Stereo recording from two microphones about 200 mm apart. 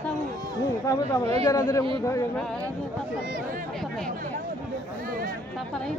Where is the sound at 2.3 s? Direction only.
5° left (ahead or behind).